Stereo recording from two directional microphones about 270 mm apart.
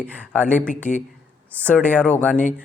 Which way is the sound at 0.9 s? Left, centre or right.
Left.